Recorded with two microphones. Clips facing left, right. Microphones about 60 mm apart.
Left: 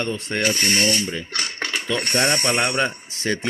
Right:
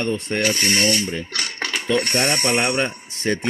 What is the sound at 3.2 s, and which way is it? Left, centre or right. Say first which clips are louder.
Speech: right 2 dB; right.